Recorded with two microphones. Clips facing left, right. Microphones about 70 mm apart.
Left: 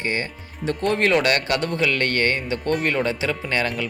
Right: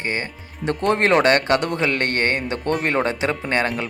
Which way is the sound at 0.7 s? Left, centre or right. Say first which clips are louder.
Right 2 dB; right.